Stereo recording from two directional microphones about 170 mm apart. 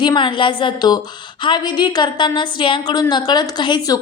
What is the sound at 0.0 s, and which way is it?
A woman's voice, 30° left (ahead or behind).